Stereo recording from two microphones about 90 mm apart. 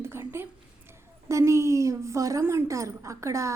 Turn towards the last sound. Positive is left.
turn(degrees=-35)  # may be behind; listen again after turning